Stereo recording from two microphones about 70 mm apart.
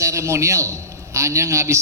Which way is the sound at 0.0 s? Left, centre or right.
Right.